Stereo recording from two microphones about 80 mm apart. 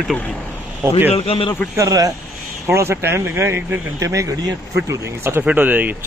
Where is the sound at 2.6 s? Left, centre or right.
Right.